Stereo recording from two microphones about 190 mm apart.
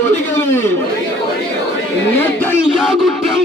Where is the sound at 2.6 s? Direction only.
Centre (ahead or behind).